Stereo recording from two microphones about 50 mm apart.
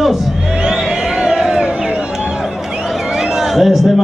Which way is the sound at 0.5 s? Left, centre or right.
Centre.